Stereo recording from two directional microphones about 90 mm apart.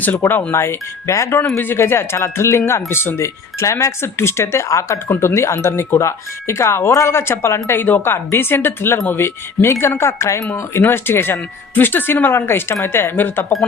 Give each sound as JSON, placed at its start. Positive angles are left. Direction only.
{"t": 0.2, "sound": "speech", "side_deg": 20}